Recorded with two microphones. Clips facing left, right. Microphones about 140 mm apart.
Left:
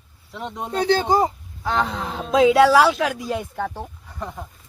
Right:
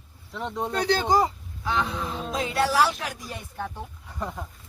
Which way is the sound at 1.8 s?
70° left (ahead or behind).